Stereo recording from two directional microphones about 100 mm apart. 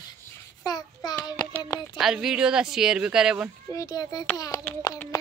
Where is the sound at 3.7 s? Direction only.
35° left (ahead or behind).